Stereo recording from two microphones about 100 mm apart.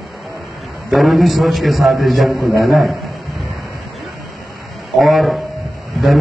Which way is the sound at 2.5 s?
Centre (ahead or behind).